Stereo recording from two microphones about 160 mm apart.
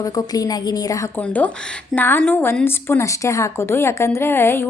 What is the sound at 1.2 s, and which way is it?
A woman's voice, 10° left (ahead or behind).